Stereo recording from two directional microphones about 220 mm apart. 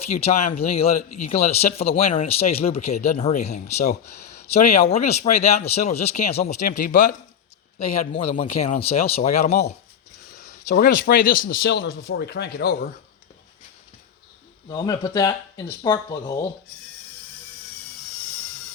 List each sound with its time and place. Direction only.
0.0 s speech: 30° left (ahead or behind)
7.9 s speech: 25° left (ahead or behind); by 12.9 s 45° left (ahead or behind)
14.7 s speech: 20° left (ahead or behind)